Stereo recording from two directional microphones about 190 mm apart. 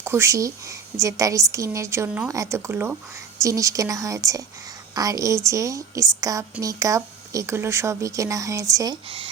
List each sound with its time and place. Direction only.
0.0 s a woman's voice: 15° right (ahead or behind)